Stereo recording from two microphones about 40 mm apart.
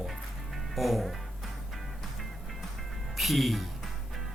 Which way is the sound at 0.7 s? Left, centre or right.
Centre.